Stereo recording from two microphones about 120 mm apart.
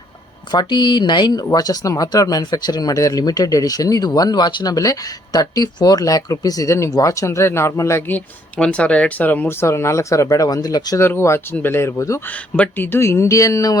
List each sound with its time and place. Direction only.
0.5 s speech: 40° left (ahead or behind)
11.0 s speech: 20° left (ahead or behind)